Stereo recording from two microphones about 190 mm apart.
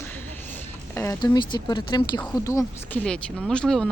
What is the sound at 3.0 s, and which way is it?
Speech, 5° left (ahead or behind).